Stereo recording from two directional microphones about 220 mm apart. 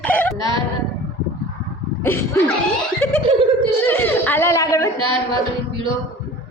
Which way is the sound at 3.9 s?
10° left (ahead or behind).